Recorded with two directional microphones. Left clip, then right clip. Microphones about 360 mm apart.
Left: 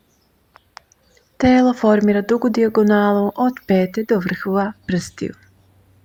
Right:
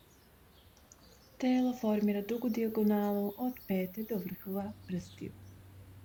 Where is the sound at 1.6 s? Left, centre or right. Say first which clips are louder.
Left 18 dB; right.